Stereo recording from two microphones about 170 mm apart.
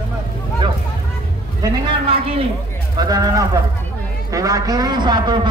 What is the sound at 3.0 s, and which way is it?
A man's voice, 25° right (ahead or behind).